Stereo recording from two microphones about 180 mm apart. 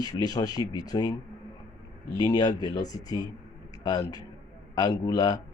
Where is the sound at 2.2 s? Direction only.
25° left (ahead or behind).